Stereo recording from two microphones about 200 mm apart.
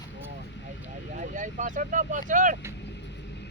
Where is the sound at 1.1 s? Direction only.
40° right (ahead or behind).